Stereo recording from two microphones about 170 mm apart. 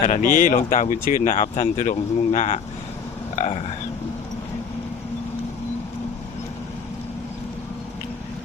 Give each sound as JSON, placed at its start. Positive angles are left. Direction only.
{"t": 0.0, "sound": "speech", "side_deg": 50}